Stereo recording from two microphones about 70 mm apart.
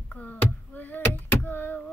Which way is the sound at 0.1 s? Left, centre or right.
Left.